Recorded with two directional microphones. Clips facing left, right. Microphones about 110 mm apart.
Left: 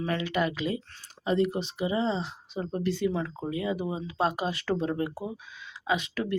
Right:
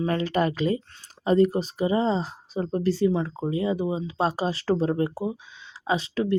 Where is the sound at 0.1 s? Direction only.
40° right (ahead or behind).